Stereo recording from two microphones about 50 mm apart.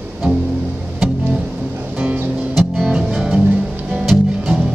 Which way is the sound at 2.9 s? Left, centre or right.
Centre.